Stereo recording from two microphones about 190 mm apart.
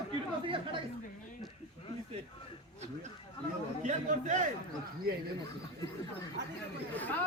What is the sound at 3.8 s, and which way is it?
Speech, 40° right (ahead or behind).